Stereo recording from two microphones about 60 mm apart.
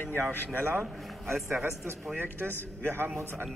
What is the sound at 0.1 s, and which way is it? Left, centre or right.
Speech, right.